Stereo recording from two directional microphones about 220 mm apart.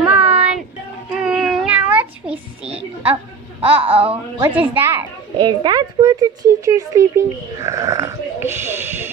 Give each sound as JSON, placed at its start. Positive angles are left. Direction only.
{"t": 0.0, "sound": "child singing", "side_deg": -5}
{"t": 2.7, "sound": "music", "side_deg": -5}
{"t": 3.6, "sound": "speech", "side_deg": -5}
{"t": 4.0, "sound": "a woman's voice", "side_deg": -25}
{"t": 4.5, "sound": "speech", "side_deg": -10}
{"t": 5.4, "sound": "speech", "side_deg": -20}